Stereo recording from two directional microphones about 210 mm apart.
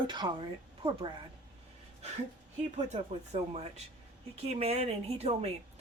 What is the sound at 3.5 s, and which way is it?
Speech, 30° right (ahead or behind).